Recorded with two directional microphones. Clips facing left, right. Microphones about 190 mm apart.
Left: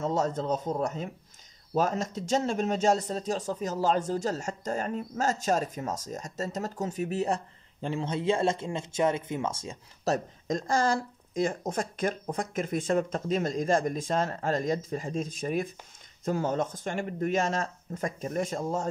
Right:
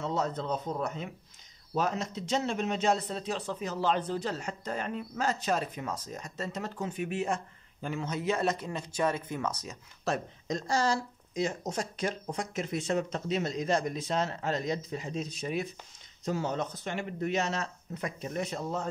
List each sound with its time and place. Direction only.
0.0 s speech: 45° left (ahead or behind); by 9.8 s 25° left (ahead or behind)
10.0 s speech: 45° left (ahead or behind)